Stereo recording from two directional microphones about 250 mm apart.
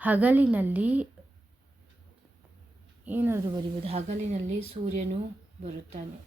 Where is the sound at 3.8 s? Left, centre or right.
Right.